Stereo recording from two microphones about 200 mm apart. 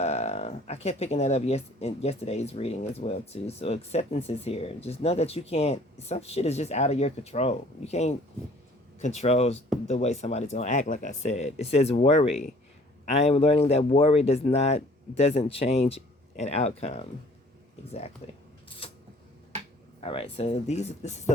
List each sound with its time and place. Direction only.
0.0 s speech: 30° left (ahead or behind)
18.2 s speech: 30° left (ahead or behind)
20.0 s speech: 30° left (ahead or behind)